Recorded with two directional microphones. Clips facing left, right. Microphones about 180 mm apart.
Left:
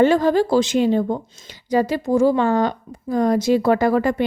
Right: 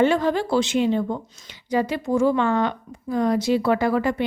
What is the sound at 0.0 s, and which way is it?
A woman's voice, 40° left (ahead or behind).